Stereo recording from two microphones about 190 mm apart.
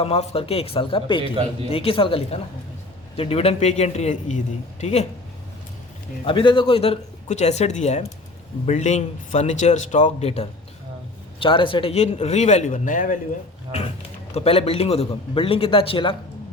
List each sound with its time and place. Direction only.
0.0 s a man's voice: 30° left (ahead or behind)
6.2 s speech: 25° left (ahead or behind); by 13.1 s 45° left (ahead or behind)
14.3 s a man's voice: 30° left (ahead or behind)